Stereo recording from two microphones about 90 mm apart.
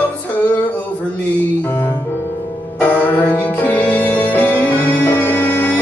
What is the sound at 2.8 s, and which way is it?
Music, 20° left (ahead or behind).